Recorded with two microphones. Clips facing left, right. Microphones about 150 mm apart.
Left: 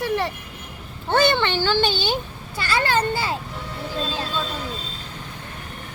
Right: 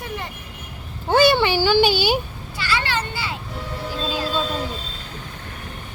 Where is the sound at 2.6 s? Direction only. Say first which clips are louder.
Left 3 dB; 45° left (ahead or behind).